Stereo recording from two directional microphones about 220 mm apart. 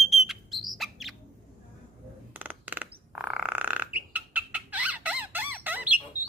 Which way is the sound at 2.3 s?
10° right (ahead or behind).